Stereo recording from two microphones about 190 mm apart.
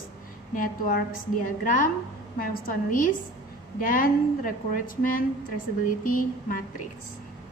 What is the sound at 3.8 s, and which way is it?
A woman's voice, 50° left (ahead or behind).